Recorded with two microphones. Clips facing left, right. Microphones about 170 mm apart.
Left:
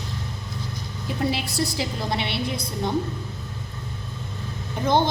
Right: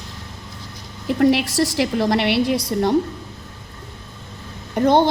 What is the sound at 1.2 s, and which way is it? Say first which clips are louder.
A woman's voice: right 9 dB; 80° right.